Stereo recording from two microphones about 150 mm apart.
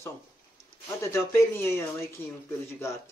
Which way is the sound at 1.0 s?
15° left (ahead or behind).